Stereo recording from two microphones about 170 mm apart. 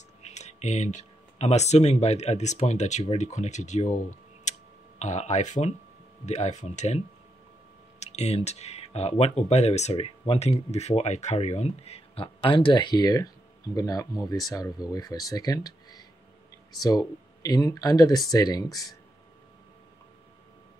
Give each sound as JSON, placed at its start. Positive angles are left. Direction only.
{"t": 0.2, "sound": "speech", "side_deg": 40}
{"t": 8.0, "sound": "speech", "side_deg": 40}